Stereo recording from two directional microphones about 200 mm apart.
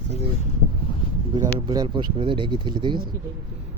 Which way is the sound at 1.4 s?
20° right (ahead or behind).